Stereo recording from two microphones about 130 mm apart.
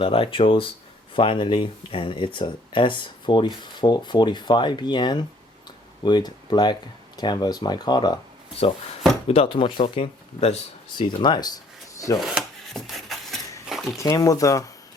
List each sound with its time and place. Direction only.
0.0 s speech: 45° left (ahead or behind)
9.2 s speech: 50° left (ahead or behind)
10.9 s speech: 35° left (ahead or behind)
12.2 s chopping: centre (ahead or behind)
13.9 s speech: 25° left (ahead or behind)